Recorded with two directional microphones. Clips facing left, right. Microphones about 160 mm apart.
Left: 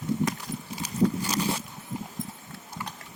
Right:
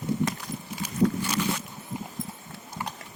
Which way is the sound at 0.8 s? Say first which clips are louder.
Right 1 dB; 35° left (ahead or behind).